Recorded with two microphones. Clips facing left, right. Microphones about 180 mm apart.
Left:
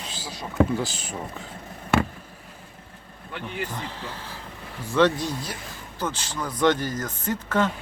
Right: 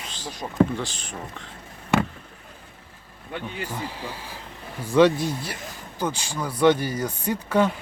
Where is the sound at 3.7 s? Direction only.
10° right (ahead or behind).